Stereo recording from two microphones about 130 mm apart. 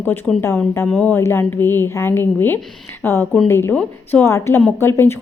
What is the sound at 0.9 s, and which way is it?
A woman's voice, 10° left (ahead or behind).